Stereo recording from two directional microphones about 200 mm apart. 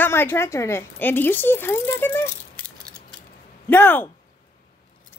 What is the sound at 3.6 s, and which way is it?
Speech, 10° left (ahead or behind).